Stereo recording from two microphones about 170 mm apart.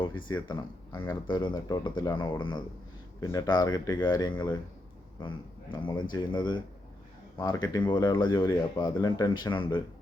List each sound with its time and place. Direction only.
0.4 s speech: 25° left (ahead or behind)
5.7 s speech: 25° left (ahead or behind)